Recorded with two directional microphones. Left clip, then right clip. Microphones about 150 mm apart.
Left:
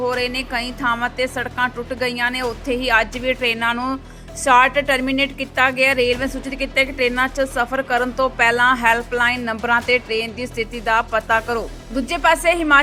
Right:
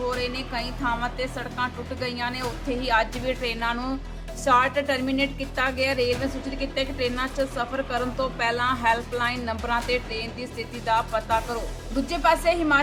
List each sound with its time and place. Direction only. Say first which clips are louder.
0.8 s a woman's voice: left 7 dB; 35° left (ahead or behind)
9.9 s speech: left 9 dB; 10° right (ahead or behind)
10.4 s a woman's voice: left 7 dB; 45° left (ahead or behind)